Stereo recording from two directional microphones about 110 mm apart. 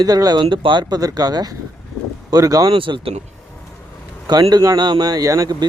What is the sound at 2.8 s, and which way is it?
Speech, 50° right (ahead or behind).